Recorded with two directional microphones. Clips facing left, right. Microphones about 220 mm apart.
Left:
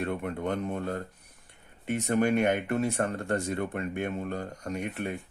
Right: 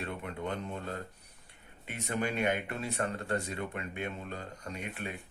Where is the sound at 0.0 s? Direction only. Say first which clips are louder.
Left 7 dB; 50° left (ahead or behind).